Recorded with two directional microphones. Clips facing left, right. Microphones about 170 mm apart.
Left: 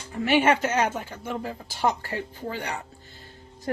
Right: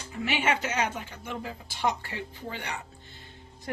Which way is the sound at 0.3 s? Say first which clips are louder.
Left 7 dB; 45° left (ahead or behind).